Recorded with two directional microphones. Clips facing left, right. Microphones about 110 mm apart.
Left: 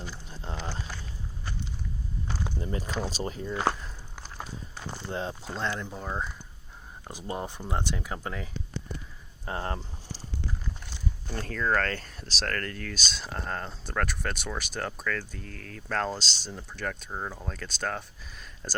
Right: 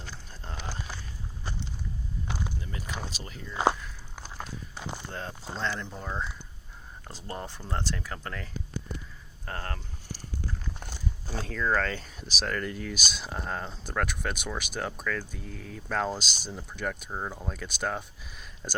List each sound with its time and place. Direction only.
0.3 s a sound: 20° left (ahead or behind)
2.6 s speech: 35° left (ahead or behind)
4.1 s walk: 5° right (ahead or behind)
4.7 s walk: 15° right (ahead or behind)
5.5 s speech: 5° left (ahead or behind)
9.5 s a sound: 20° left (ahead or behind)
11.3 s speech: centre (ahead or behind)